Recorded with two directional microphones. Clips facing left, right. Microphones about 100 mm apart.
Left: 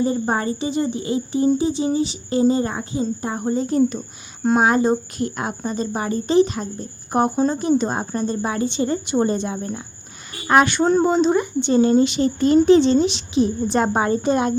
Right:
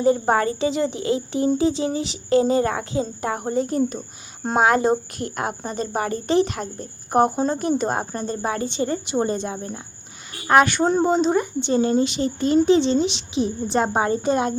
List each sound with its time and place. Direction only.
0.0 s a woman's voice: 75° right (ahead or behind); by 3.8 s 60° right (ahead or behind)
4.5 s a woman's voice: 85° right; by 14.5 s 35° right (ahead or behind)